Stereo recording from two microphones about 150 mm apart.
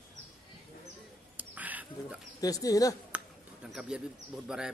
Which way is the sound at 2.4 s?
25° left (ahead or behind).